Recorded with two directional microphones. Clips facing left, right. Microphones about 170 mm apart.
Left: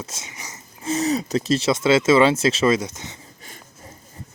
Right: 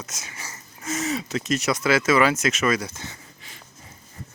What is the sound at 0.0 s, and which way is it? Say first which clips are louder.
Wheeze: left 3 dB; 25° left (ahead or behind).